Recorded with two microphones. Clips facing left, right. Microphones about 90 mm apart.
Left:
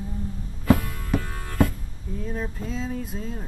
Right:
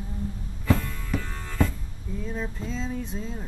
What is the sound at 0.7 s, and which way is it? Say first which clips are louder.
Music: left 5 dB; 10° left (ahead or behind).